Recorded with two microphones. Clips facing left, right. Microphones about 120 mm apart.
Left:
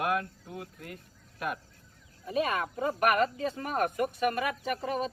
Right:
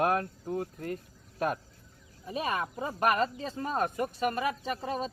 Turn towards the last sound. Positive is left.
turn(degrees=-25)  # may be behind; listen again after turning